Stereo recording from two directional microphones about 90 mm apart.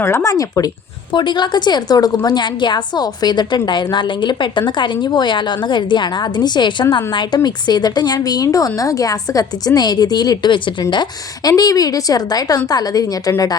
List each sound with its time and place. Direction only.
0.0 s speech: 30° left (ahead or behind)
1.1 s a woman's voice: 60° left (ahead or behind)
2.2 s a woman's voice: 55° left (ahead or behind)